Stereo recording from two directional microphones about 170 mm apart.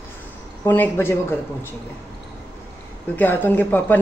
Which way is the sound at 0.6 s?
10° left (ahead or behind).